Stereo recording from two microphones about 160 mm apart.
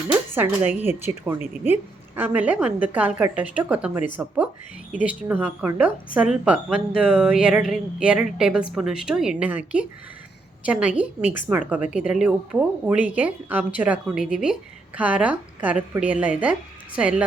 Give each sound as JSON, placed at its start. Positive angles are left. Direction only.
{"t": 0.1, "sound": "speech", "side_deg": -10}
{"t": 5.0, "sound": "speech", "side_deg": -10}
{"t": 10.7, "sound": "speech", "side_deg": -10}